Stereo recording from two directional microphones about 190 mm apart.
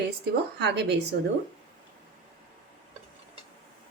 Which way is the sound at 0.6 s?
60° right (ahead or behind).